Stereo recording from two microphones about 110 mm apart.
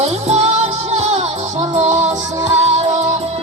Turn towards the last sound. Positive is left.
turn(degrees=-90)